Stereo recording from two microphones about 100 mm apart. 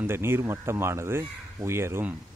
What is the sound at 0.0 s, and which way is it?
Speech, 25° right (ahead or behind).